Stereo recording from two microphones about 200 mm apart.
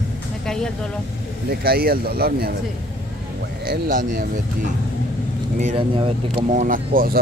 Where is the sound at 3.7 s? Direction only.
45° right (ahead or behind).